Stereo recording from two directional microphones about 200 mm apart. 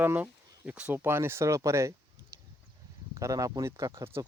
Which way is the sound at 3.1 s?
15° right (ahead or behind).